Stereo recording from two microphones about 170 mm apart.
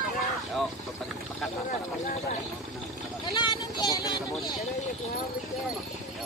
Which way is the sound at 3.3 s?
25° left (ahead or behind).